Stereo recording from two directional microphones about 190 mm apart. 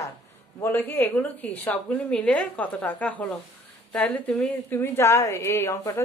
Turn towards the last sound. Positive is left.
turn(degrees=15)  # may be behind; listen again after turning